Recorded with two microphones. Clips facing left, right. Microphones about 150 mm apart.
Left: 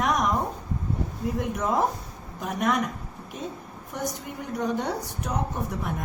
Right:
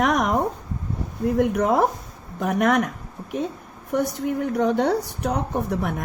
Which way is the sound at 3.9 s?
60° right (ahead or behind).